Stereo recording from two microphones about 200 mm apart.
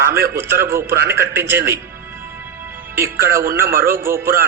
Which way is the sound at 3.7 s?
45° right (ahead or behind).